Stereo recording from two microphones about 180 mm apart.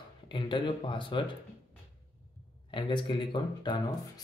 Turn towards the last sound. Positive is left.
turn(degrees=25)  # may be behind; listen again after turning